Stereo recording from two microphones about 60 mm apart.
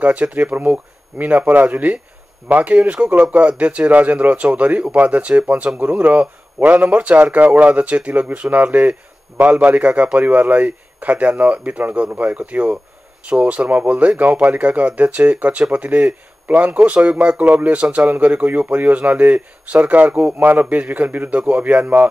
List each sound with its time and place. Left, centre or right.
0.0 s speech: right